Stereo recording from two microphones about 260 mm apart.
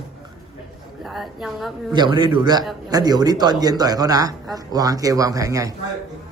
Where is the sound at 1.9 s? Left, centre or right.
Centre.